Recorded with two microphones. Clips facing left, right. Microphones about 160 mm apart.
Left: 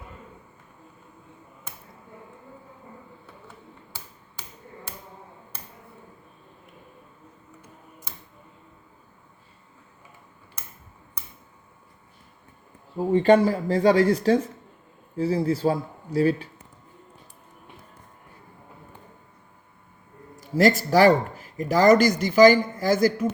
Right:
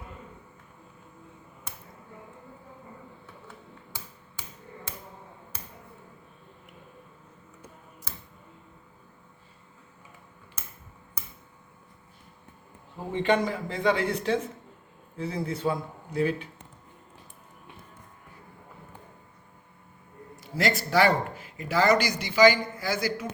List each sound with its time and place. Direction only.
13.1 s speech: 35° left (ahead or behind)
20.3 s speech: 40° left (ahead or behind)